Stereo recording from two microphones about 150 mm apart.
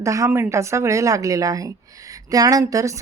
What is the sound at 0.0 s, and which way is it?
A woman's voice, 20° right (ahead or behind).